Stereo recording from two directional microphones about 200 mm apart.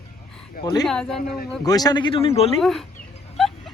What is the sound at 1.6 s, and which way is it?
Speech, 20° left (ahead or behind).